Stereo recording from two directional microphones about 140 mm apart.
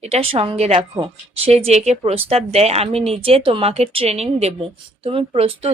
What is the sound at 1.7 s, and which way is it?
Speech, 50° right (ahead or behind).